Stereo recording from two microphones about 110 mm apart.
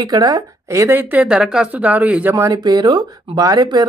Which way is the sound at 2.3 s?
30° right (ahead or behind).